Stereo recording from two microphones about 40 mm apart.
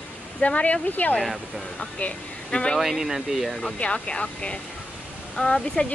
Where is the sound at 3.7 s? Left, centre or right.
Left.